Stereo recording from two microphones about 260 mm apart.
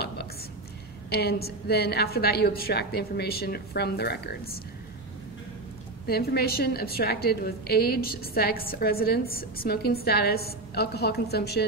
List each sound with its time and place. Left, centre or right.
1.1 s a woman's voice: left
6.0 s a woman's voice: left